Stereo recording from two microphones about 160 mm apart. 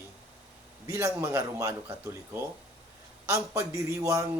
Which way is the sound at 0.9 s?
20° right (ahead or behind).